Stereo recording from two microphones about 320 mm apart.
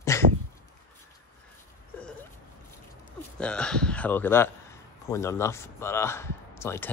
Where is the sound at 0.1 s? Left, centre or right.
Centre.